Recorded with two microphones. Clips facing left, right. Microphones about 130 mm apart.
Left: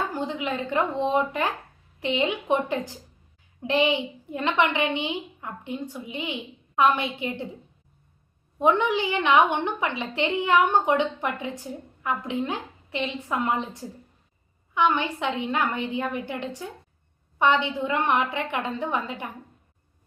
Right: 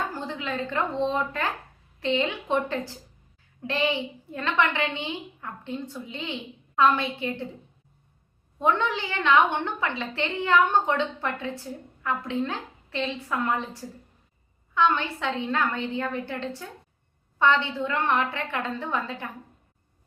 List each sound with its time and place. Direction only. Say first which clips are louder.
0.1 s a woman's voice: left 3 dB; 15° left (ahead or behind)
8.5 s a woman's voice: left 3 dB; 15° left (ahead or behind)